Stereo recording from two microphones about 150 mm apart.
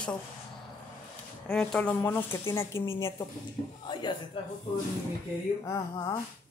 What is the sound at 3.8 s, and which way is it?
Speech, 30° left (ahead or behind).